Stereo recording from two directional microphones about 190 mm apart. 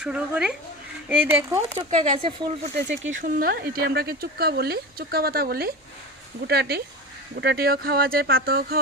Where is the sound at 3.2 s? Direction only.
50° right (ahead or behind).